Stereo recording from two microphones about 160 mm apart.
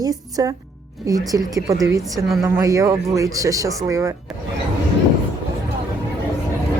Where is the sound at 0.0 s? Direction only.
20° right (ahead or behind).